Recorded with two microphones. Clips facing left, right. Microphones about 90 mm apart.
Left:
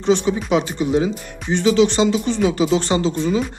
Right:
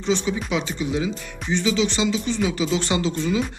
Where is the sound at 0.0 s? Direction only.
45° left (ahead or behind).